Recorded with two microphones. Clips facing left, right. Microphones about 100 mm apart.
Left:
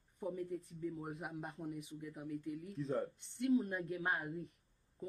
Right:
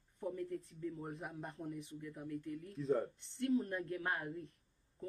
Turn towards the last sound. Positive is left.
turn(degrees=15)  # may be behind; listen again after turning